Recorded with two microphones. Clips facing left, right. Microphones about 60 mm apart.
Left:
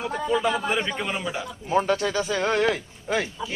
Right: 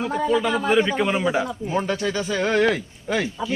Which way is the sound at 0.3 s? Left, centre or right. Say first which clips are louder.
Right 3 dB; centre.